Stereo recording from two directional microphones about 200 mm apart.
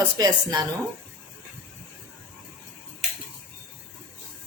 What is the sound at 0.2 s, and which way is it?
Speech, 20° right (ahead or behind).